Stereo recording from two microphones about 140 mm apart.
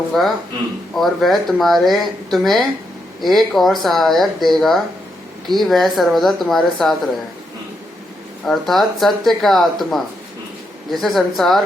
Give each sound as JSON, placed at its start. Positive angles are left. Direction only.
{"t": 0.1, "sound": "speech", "side_deg": 0}
{"t": 8.4, "sound": "speech", "side_deg": 0}